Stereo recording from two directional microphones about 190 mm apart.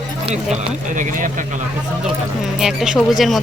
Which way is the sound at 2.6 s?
Centre (ahead or behind).